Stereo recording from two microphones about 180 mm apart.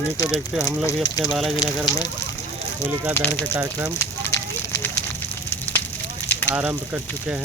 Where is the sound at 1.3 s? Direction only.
Centre (ahead or behind).